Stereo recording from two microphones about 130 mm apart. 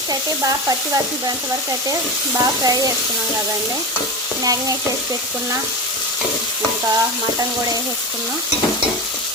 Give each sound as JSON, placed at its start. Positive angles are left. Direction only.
{"t": 2.4, "sound": "speech", "side_deg": -25}